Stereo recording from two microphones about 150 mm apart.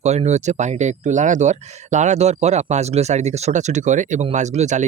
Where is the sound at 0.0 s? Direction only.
45° right (ahead or behind).